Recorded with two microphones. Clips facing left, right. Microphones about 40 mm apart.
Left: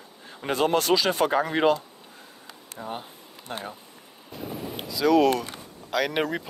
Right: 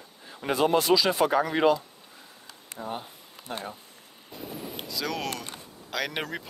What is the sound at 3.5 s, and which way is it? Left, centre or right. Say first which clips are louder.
Speech: left 1 dB; left.